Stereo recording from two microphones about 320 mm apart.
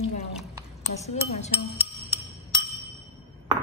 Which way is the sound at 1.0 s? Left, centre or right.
Left.